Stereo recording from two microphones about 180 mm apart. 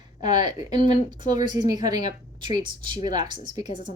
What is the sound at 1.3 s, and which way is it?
Speech, 25° right (ahead or behind).